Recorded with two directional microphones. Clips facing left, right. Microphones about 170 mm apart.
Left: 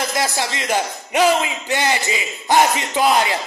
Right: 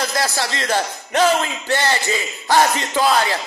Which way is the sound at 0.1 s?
15° left (ahead or behind).